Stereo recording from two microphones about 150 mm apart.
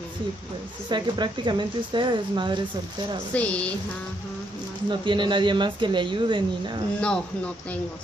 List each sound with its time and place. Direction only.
0.8 s speech: 30° right (ahead or behind)
3.3 s speech: 10° left (ahead or behind)
4.8 s speech: 30° right (ahead or behind)